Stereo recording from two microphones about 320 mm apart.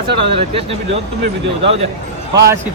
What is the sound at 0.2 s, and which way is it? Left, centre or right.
Speech, centre.